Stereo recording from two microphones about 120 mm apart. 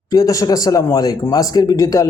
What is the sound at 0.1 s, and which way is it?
Speech, 30° left (ahead or behind).